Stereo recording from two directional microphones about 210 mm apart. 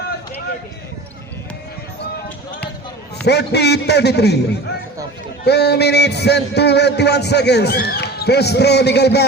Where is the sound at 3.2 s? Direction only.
55° left (ahead or behind).